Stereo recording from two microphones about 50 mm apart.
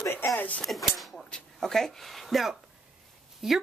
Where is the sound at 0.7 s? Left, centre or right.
Centre.